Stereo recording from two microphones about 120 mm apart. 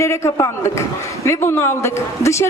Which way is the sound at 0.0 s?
25° left (ahead or behind).